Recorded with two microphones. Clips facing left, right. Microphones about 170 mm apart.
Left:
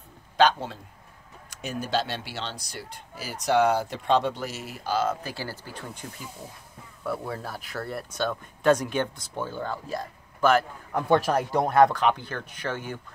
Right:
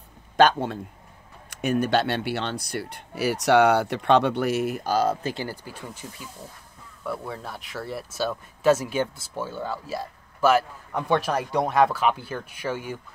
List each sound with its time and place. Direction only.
0.4 s a man's voice: 55° right (ahead or behind)
5.2 s speech: 20° right (ahead or behind)
7.1 s speech: centre (ahead or behind)